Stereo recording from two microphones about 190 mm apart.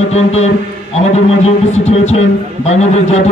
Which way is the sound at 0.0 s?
35° left (ahead or behind).